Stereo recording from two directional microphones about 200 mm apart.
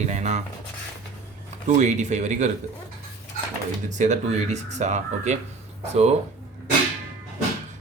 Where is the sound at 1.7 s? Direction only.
35° right (ahead or behind).